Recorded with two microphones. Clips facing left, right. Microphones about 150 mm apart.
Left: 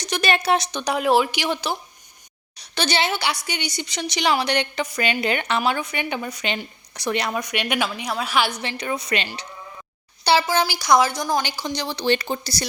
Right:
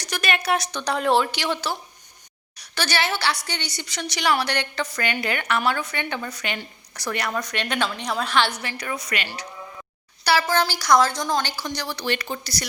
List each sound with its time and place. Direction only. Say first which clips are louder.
0.0 s a woman's voice: left 4 dB; 25° left (ahead or behind); by 8.5 s 10° left (ahead or behind)
8.6 s speech: left 3 dB; 25° left (ahead or behind)
10.4 s speech: even; 10° left (ahead or behind); by 12.6 s 30° left (ahead or behind)